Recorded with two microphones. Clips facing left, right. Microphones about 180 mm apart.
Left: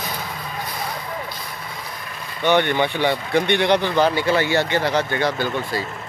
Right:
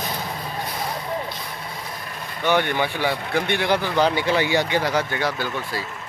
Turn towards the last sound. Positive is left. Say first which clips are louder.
# left 3 dB
turn(degrees=-5)  # may be behind; listen again after turning